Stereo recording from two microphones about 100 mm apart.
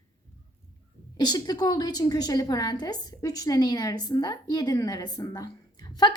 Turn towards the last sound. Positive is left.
turn(degrees=45)  # may be behind; listen again after turning